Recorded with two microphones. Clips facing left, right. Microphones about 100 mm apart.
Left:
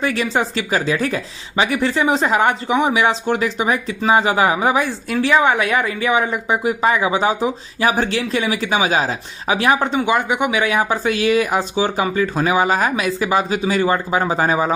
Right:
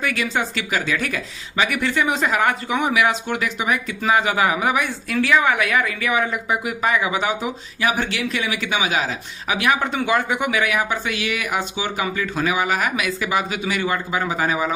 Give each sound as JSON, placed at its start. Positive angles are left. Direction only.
{"t": 0.0, "sound": "speech", "side_deg": 30}